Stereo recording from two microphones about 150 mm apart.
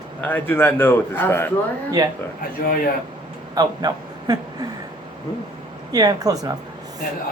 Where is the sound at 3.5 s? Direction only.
25° right (ahead or behind).